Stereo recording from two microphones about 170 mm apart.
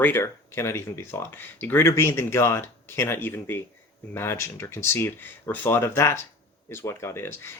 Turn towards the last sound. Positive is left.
turn(degrees=15)  # may be behind; listen again after turning